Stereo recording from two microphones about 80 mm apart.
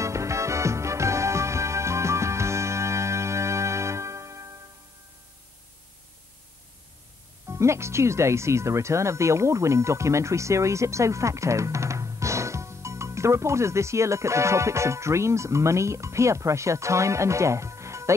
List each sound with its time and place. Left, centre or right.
0.0 s music: right
7.4 s speech: right